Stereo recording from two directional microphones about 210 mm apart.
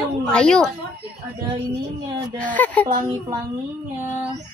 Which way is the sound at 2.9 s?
20° right (ahead or behind).